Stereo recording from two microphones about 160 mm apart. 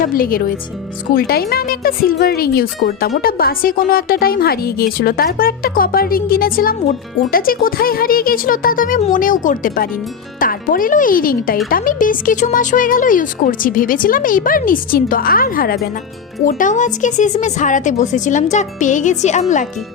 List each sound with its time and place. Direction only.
0.0 s speech: 65° left (ahead or behind)
16.5 s speech: 55° left (ahead or behind)